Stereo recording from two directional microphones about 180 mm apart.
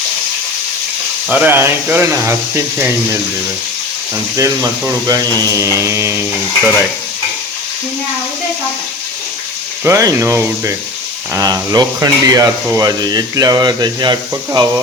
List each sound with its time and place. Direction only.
1.3 s speech: 10° right (ahead or behind)
4.4 s speech: 20° right (ahead or behind)
9.8 s speech: 15° right (ahead or behind)